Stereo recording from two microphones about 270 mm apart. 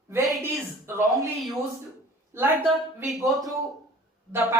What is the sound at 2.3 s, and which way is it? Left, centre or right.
A man's voice, centre.